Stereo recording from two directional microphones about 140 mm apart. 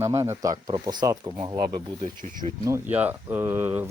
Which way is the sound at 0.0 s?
20° right (ahead or behind).